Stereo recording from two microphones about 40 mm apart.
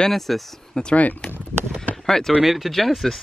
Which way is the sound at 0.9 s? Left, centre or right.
Left.